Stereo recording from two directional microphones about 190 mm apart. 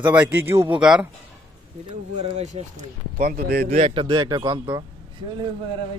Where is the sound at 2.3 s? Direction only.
40° right (ahead or behind).